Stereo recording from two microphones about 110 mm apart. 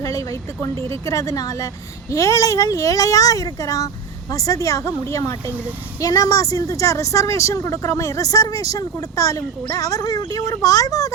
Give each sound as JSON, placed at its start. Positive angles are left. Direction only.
{"t": 0.0, "sound": "a woman's voice", "side_deg": 30}